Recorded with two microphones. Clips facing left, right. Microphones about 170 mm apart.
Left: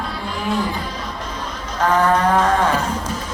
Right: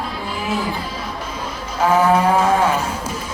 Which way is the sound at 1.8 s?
10° right (ahead or behind).